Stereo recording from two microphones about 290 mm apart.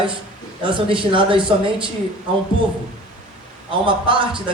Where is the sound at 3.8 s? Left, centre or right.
Centre.